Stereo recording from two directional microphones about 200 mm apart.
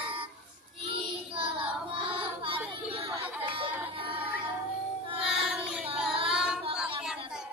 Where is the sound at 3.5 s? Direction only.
25° right (ahead or behind).